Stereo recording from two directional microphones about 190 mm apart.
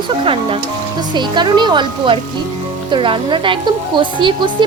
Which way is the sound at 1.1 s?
25° right (ahead or behind).